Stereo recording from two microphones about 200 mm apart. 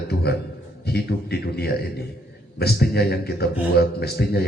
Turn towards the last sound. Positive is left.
turn(degrees=55)  # may be behind; listen again after turning